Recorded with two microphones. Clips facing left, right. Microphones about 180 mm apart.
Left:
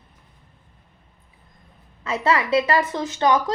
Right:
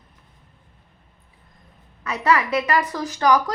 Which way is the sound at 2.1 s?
25° left (ahead or behind).